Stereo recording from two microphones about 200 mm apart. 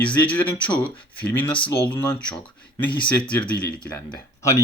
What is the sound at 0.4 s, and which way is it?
Speech, 25° left (ahead or behind).